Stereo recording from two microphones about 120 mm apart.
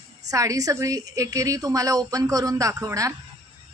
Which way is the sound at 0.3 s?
30° right (ahead or behind).